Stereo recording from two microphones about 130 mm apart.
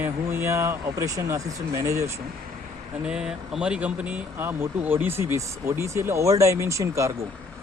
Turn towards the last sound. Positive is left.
turn(degrees=-25)  # may be behind; listen again after turning